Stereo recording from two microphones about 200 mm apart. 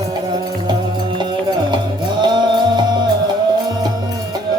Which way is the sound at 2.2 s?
20° right (ahead or behind).